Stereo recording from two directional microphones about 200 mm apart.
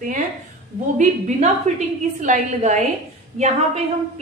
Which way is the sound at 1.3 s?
30° right (ahead or behind).